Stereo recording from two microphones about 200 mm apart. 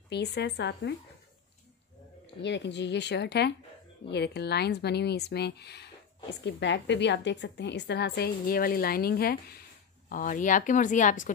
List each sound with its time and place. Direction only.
0.1 s a woman's voice: 55° left (ahead or behind)
2.4 s a woman's voice: 60° left (ahead or behind); by 11.3 s 40° left (ahead or behind)